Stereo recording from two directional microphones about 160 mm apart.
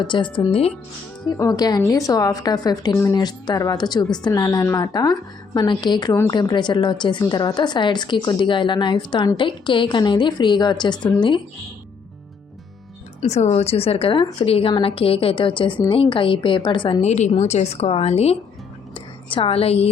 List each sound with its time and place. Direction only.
0.0 s a woman's voice: 30° left (ahead or behind)
1.3 s a woman's voice: 25° left (ahead or behind)
13.2 s a woman's voice: 45° left (ahead or behind)